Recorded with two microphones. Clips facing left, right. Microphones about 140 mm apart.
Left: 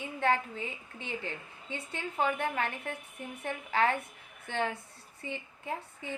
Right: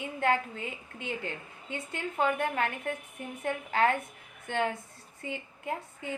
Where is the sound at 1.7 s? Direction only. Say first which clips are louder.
Right 2 dB; 50° right (ahead or behind).